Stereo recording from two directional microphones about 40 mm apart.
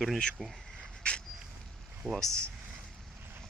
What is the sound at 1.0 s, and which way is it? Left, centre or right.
Vehicle, left.